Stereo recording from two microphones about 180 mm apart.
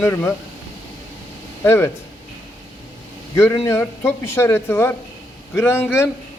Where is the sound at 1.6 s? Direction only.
15° left (ahead or behind).